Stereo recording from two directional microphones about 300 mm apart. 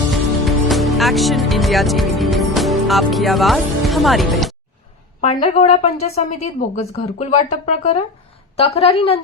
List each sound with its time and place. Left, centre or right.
0.1 s music: centre
5.2 s a woman's voice: left